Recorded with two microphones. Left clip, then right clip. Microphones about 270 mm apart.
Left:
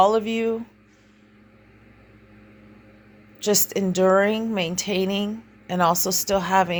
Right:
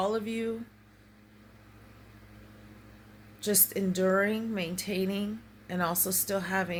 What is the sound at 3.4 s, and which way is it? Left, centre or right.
A woman's voice, centre.